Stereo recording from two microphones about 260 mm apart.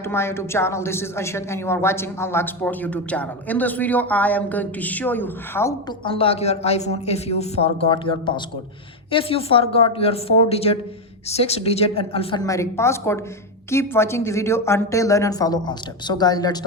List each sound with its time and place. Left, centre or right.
0.1 s a woman's voice: centre
6.1 s a woman's voice: left